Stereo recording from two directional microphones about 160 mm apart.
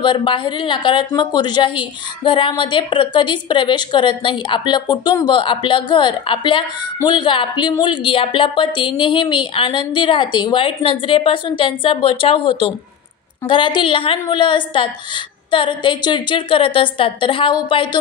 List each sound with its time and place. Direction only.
0.0 s a woman's voice: 30° left (ahead or behind)